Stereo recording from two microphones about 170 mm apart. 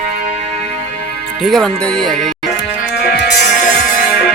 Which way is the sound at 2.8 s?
65° left (ahead or behind).